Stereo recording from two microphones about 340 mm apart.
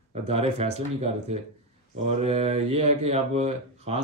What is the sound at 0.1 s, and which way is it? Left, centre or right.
Speech, centre.